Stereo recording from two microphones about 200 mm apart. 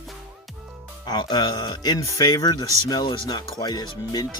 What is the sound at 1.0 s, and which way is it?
Speech, 20° left (ahead or behind).